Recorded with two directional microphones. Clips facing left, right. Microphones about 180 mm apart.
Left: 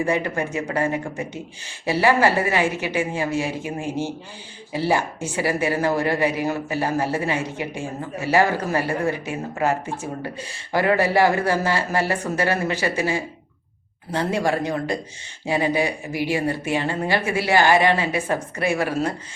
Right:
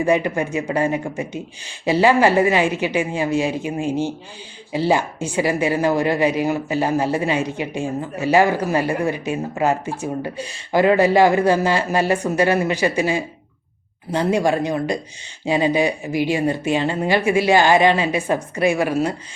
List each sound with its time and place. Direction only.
0.0 s speech: 15° right (ahead or behind)